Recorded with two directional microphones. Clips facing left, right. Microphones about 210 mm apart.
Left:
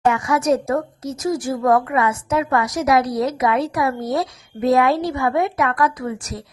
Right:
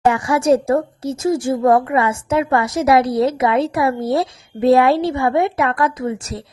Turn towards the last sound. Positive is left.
turn(degrees=-25)  # may be behind; listen again after turning